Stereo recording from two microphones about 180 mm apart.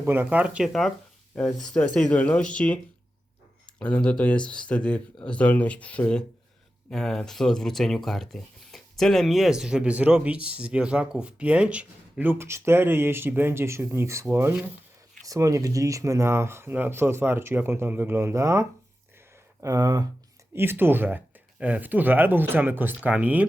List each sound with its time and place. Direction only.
0.0 s speech: 10° right (ahead or behind); by 2.7 s 5° left (ahead or behind)
3.8 s speech: 5° left (ahead or behind); by 18.6 s 15° right (ahead or behind)
19.6 s speech: 20° right (ahead or behind)